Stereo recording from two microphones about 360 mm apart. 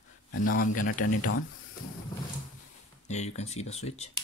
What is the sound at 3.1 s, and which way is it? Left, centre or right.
Speech, centre.